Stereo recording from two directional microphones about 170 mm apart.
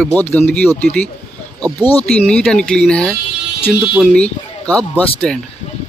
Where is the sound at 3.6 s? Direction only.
35° left (ahead or behind).